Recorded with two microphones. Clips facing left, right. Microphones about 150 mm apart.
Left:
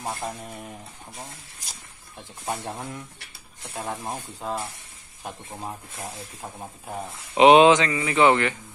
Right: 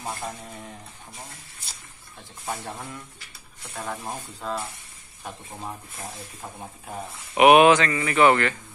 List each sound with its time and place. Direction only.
0.0 s speech: 15° left (ahead or behind)
2.4 s speech: 20° left (ahead or behind)
6.4 s speech: 10° left (ahead or behind)
7.3 s speech: 25° left (ahead or behind)